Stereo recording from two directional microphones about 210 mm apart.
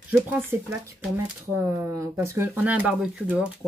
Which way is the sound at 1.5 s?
15° right (ahead or behind).